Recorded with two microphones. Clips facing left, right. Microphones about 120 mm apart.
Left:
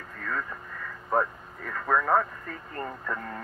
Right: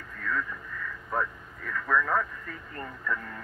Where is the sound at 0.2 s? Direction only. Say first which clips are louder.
Right 1 dB; 45° left (ahead or behind).